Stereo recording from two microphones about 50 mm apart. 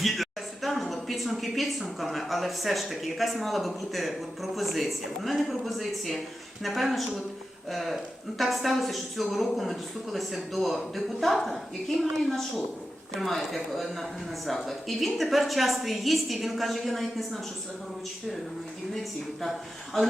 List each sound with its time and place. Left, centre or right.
0.0 s a sound: centre
2.0 s a woman's voice: centre
18.9 s a woman's voice: centre